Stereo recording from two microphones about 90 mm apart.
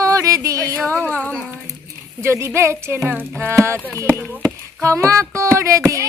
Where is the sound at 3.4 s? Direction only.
30° right (ahead or behind).